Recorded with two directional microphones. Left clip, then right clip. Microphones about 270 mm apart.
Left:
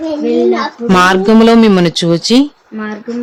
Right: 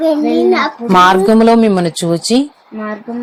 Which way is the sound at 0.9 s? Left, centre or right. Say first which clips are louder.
Right 1 dB; centre.